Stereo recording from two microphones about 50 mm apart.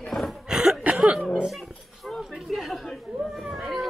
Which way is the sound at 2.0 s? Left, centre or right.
Centre.